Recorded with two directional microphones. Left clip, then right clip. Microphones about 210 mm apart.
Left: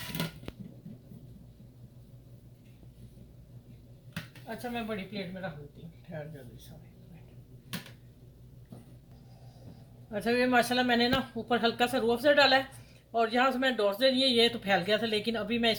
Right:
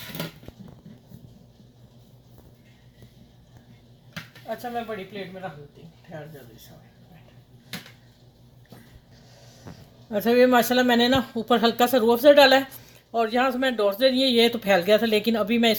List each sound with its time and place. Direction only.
10.1 s speech: 50° right (ahead or behind)